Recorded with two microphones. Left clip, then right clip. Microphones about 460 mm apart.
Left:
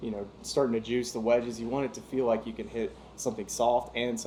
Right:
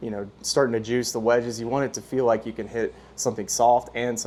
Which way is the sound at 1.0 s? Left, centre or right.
Right.